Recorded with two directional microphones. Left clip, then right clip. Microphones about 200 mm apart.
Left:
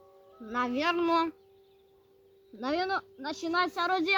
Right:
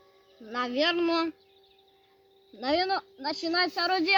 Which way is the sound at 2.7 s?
25° left (ahead or behind).